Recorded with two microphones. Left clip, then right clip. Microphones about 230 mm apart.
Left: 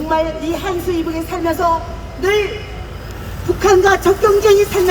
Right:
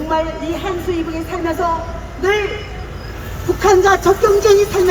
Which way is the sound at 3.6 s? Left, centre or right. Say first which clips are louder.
Even; left.